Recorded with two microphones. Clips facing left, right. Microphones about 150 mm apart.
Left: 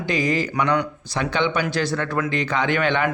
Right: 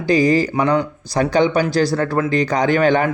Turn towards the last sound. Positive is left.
turn(degrees=-40)  # may be behind; listen again after turning